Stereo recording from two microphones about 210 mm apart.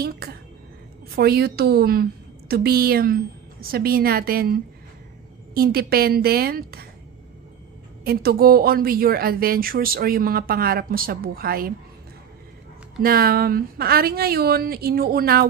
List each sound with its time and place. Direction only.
0.0 s speech: 45° right (ahead or behind)
8.0 s speech: 45° right (ahead or behind)
13.0 s speech: 45° right (ahead or behind)